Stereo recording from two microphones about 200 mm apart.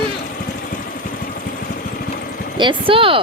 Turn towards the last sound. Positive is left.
turn(degrees=-25)  # may be behind; listen again after turning